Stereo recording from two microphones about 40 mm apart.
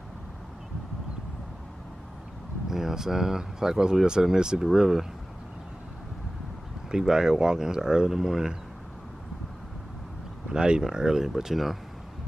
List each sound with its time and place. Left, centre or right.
2.7 s speech: centre
6.9 s speech: centre
10.5 s speech: right